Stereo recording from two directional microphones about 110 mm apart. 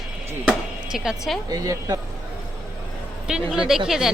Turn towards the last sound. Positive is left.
turn(degrees=-5)  # may be behind; listen again after turning